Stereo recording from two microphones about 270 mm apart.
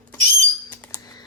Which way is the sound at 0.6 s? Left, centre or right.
Centre.